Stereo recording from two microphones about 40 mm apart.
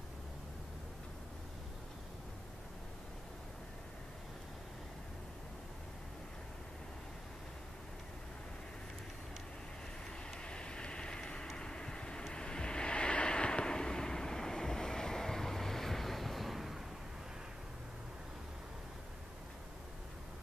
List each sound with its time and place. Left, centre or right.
10.4 s vehicle: left; by 16.8 s centre